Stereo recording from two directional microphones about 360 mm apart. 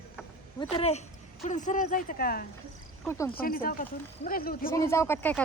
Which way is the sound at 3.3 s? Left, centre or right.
Left.